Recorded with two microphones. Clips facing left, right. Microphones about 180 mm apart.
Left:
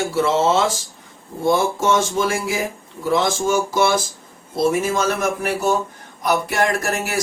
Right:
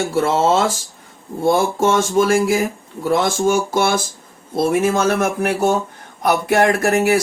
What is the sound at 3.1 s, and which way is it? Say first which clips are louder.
Speech: right 2 dB; 55° right (ahead or behind).